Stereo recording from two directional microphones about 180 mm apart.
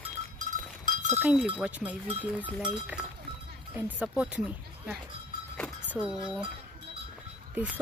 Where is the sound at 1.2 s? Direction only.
5° right (ahead or behind).